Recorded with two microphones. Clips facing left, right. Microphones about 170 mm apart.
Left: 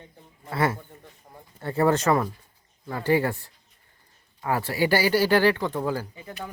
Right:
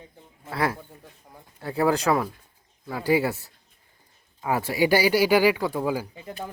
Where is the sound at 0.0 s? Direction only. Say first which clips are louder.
Right 1 dB; 5° right (ahead or behind).